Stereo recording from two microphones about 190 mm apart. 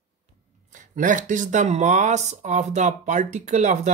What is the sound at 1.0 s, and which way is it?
Speech, 45° right (ahead or behind).